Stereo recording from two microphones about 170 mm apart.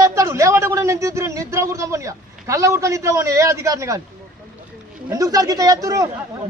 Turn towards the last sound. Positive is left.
turn(degrees=-20)  # may be behind; listen again after turning